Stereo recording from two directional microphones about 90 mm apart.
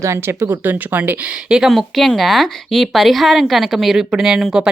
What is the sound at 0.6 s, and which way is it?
Speech, 20° right (ahead or behind).